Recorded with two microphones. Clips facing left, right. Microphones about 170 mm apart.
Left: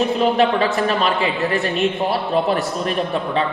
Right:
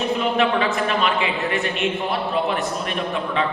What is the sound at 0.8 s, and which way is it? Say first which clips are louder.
A man's voice: left 3 dB; 35° left (ahead or behind).